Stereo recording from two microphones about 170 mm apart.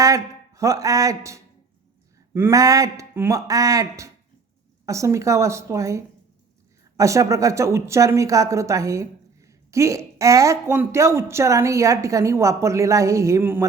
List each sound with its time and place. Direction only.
0.0 s speech: 20° right (ahead or behind)